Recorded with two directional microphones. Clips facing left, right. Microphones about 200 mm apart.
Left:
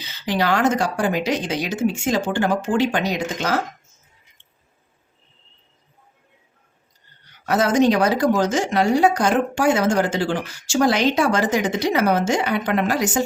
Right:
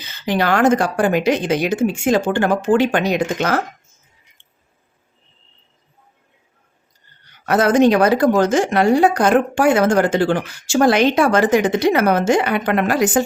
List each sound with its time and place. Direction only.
0.0 s speech: 50° right (ahead or behind)
7.4 s speech: 55° right (ahead or behind)